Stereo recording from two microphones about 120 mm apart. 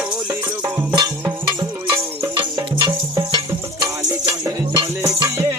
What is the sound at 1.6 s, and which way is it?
Music, 40° right (ahead or behind).